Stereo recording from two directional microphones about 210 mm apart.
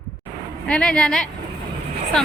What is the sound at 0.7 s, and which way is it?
Speech, 5° left (ahead or behind).